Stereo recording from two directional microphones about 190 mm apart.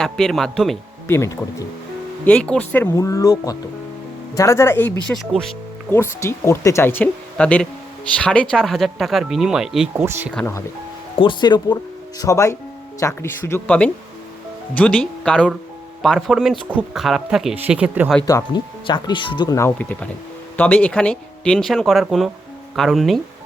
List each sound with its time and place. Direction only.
0.0 s speech: centre (ahead or behind)
1.0 s speech: 15° left (ahead or behind)
5.0 s speech: centre (ahead or behind)
5.9 s speech: 15° left (ahead or behind); by 10.3 s 10° right (ahead or behind)
10.3 s speech: 10° left (ahead or behind)
11.2 s speech: 25° left (ahead or behind); by 18.1 s 5° right (ahead or behind)
18.3 s speech: 20° left (ahead or behind); by 23.2 s centre (ahead or behind)